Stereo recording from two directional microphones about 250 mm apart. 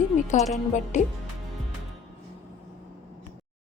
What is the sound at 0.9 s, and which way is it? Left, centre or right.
Speech, left.